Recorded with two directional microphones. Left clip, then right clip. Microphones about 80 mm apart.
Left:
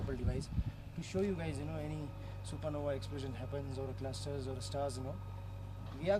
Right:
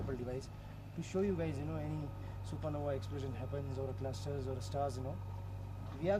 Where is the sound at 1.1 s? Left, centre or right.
Left.